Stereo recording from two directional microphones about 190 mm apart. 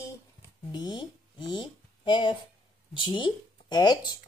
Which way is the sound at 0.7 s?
25° left (ahead or behind).